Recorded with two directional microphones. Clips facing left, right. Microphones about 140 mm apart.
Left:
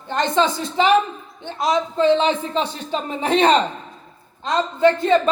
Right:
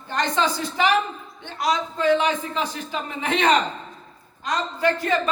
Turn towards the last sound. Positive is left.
turn(degrees=25)  # may be behind; listen again after turning